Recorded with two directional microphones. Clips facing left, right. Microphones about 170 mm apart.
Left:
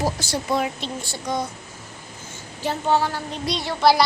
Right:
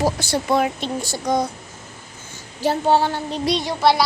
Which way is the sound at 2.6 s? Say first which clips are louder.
Right 4 dB; 35° right (ahead or behind).